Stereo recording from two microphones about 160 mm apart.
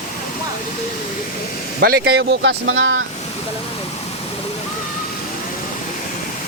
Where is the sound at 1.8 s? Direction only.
80° right.